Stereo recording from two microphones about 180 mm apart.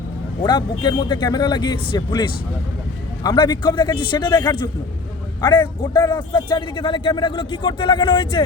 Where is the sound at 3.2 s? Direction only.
25° left (ahead or behind).